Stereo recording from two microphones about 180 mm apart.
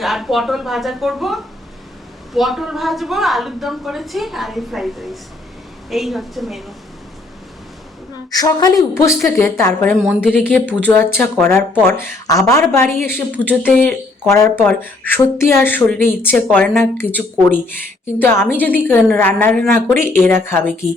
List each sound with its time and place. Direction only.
0.0 s a woman's voice: centre (ahead or behind)
8.3 s a woman's voice: 20° left (ahead or behind)
10.1 s a woman's voice: 5° right (ahead or behind)
10.8 s speech: 10° left (ahead or behind)